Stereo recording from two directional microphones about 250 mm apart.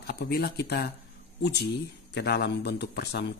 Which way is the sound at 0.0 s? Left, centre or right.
Left.